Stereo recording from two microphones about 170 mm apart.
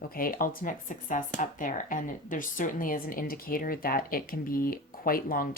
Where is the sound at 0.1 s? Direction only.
55° left (ahead or behind).